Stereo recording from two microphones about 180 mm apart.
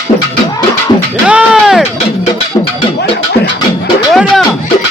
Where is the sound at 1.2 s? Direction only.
5° right (ahead or behind).